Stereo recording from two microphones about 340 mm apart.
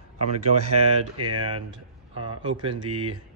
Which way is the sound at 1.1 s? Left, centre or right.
Right.